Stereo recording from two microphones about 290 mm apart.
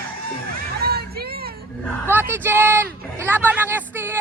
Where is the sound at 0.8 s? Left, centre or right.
Right.